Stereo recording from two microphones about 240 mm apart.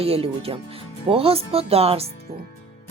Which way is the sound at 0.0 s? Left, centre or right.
Right.